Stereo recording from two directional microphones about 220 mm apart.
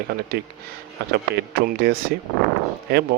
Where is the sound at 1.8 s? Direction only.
45° right (ahead or behind).